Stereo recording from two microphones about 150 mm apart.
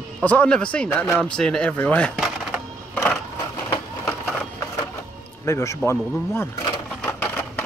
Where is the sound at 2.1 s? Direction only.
Centre (ahead or behind).